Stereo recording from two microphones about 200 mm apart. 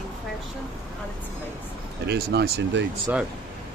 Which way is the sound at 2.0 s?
55° right (ahead or behind).